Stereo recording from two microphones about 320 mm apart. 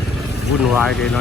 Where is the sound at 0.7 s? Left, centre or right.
Centre.